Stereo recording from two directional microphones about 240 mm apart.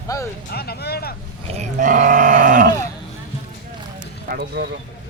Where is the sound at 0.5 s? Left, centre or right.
Left.